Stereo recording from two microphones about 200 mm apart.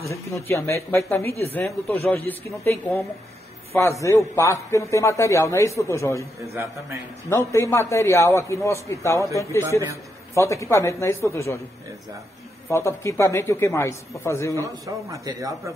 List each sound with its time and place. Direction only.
0.0 s speech: 15° left (ahead or behind)
6.5 s a man's voice: 15° right (ahead or behind)
7.2 s speech: 15° left (ahead or behind)
12.6 s speech: 15° left (ahead or behind)
14.6 s a man's voice: 15° right (ahead or behind)